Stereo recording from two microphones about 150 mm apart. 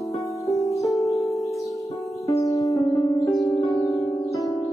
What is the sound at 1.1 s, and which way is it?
Music, 20° left (ahead or behind).